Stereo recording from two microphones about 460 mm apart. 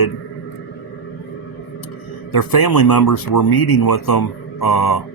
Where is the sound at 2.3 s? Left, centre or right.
Left.